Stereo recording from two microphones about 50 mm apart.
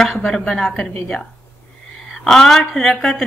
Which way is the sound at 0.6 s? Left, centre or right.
Left.